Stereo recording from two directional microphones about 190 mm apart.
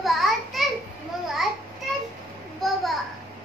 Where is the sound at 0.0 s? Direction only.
Centre (ahead or behind).